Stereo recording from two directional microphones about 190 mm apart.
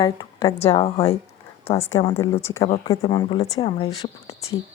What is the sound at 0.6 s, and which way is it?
Speech, 30° left (ahead or behind).